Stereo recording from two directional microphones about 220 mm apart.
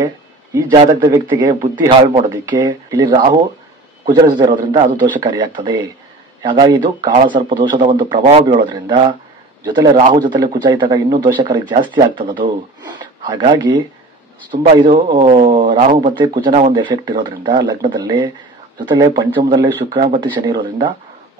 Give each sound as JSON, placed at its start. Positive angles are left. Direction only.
{"t": 0.6, "sound": "a man's voice", "side_deg": -15}
{"t": 4.8, "sound": "a man's voice", "side_deg": -35}
{"t": 5.2, "sound": "speech", "side_deg": -20}
{"t": 10.0, "sound": "a man's voice", "side_deg": -40}
{"t": 10.3, "sound": "speech", "side_deg": -20}